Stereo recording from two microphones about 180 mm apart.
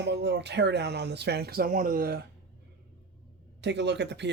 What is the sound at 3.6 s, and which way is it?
Speech, 70° right (ahead or behind).